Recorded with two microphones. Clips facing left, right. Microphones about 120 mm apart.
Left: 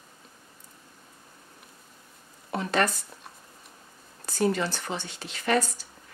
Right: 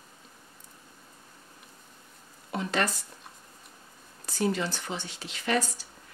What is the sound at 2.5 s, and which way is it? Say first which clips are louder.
Speech: left 3 dB; 50° left (ahead or behind).